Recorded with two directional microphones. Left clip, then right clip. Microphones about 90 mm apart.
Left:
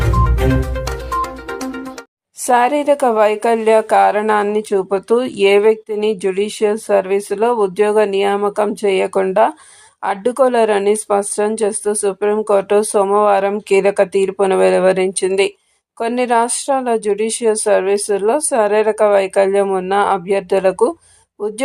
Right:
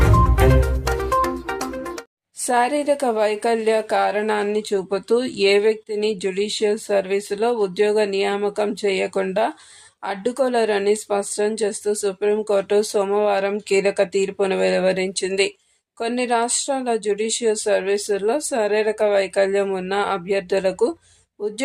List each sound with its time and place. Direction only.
0.0 s music: centre (ahead or behind)
2.5 s speech: 40° left (ahead or behind)